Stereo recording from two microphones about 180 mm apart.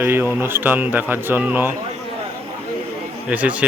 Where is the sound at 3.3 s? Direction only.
10° right (ahead or behind).